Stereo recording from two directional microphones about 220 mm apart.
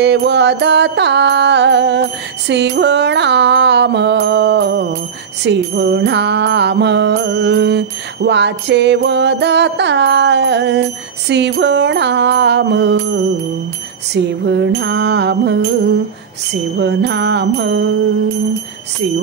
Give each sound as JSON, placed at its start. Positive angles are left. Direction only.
{"t": 0.0, "sound": "music", "side_deg": -50}
{"t": 16.7, "sound": "music", "side_deg": -50}